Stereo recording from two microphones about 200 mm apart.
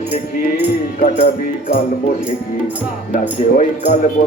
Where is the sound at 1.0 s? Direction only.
40° left (ahead or behind).